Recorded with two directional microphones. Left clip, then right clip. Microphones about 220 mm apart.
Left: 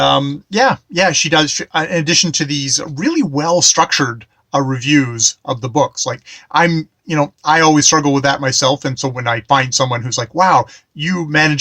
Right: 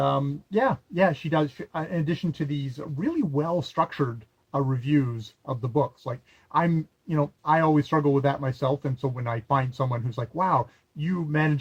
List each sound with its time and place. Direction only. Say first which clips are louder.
0.0 s speech: left 12 dB; 20° left (ahead or behind)